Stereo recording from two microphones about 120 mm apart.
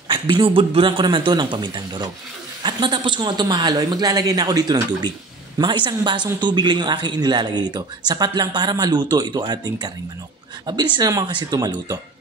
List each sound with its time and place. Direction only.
0.1 s speech: 45° right (ahead or behind)